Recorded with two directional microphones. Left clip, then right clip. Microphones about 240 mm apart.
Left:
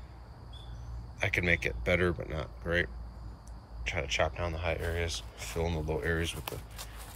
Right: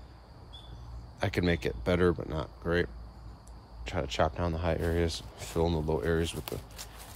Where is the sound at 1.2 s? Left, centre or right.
Centre.